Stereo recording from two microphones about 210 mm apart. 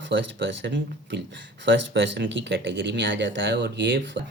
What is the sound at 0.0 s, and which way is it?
Speech, 60° right (ahead or behind).